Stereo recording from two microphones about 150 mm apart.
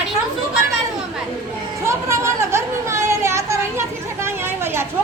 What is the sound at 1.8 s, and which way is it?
Chatter, 20° right (ahead or behind).